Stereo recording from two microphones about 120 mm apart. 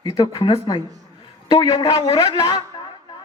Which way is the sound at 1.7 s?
35° left (ahead or behind).